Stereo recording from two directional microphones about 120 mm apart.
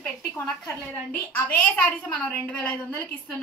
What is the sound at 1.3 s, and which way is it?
A woman's voice, 15° left (ahead or behind).